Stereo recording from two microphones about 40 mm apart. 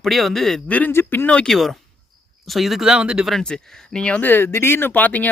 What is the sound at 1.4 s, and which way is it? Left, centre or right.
Speech, centre.